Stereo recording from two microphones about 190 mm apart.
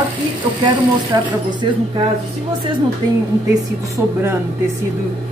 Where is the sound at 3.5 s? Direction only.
15° right (ahead or behind).